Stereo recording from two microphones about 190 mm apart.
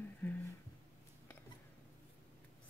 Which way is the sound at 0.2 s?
10° left (ahead or behind).